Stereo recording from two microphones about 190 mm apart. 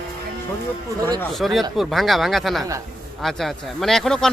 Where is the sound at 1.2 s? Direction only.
Centre (ahead or behind).